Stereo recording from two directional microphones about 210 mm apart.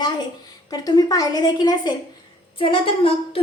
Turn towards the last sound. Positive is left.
turn(degrees=25)  # may be behind; listen again after turning